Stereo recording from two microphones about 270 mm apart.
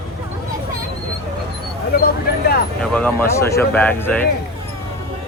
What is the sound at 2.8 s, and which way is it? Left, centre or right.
Speech, centre.